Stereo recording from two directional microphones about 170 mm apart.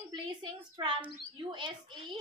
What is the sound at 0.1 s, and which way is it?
A woman's voice, 25° right (ahead or behind).